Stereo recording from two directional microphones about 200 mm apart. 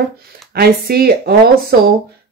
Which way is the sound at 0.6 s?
50° right (ahead or behind).